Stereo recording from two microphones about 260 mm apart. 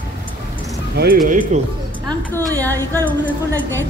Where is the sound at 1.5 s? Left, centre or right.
Right.